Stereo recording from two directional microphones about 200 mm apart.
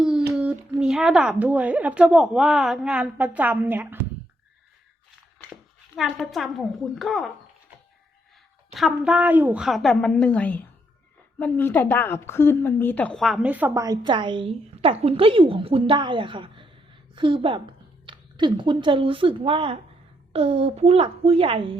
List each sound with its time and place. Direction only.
0.3 s speech: 5° right (ahead or behind)
6.0 s speech: centre (ahead or behind)
8.7 s a woman's voice: centre (ahead or behind); by 21.8 s 25° right (ahead or behind)